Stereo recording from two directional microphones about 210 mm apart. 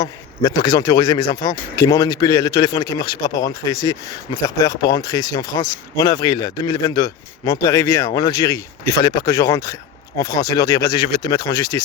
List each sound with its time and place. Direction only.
0.0 s speech: 20° left (ahead or behind)